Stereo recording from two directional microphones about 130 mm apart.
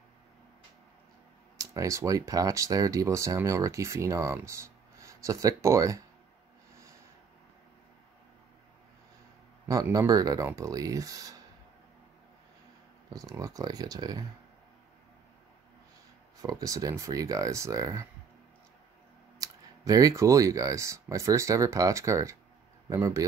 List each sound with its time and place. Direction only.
1.6 s speech: 25° right (ahead or behind)
9.7 s speech: 25° right (ahead or behind)
13.1 s speech: 25° right (ahead or behind)
16.3 s speech: 25° right (ahead or behind)
19.4 s speech: 25° right (ahead or behind)